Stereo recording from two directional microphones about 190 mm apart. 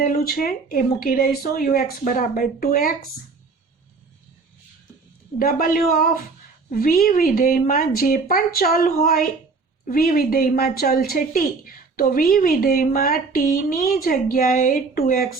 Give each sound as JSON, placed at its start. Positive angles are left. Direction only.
{"t": 0.0, "sound": "a woman's voice", "side_deg": 50}
{"t": 5.4, "sound": "a woman's voice", "side_deg": 50}